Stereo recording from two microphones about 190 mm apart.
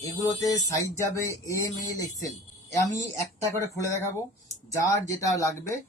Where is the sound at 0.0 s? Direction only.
20° left (ahead or behind).